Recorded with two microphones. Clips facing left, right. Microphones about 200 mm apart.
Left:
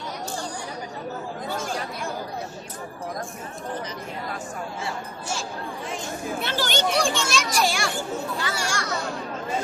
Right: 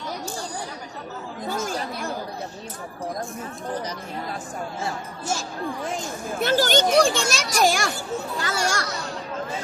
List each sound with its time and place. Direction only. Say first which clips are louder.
1.5 s chatter: right 4 dB; 40° right (ahead or behind)
6.4 s speech: right 7 dB; 45° right (ahead or behind)
8.4 s children playing: right 3 dB; 45° right (ahead or behind)